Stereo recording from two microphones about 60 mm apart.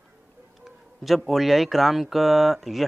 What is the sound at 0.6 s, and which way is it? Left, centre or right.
Speech, centre.